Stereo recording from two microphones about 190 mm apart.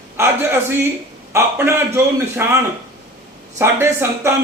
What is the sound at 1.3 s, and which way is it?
A man's voice, 10° right (ahead or behind).